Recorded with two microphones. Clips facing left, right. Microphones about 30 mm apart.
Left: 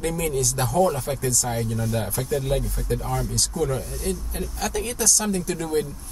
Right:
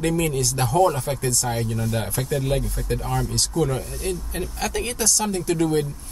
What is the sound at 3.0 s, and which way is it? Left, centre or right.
Speech, right.